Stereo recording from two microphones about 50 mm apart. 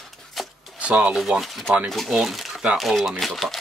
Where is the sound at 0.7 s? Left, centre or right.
Right.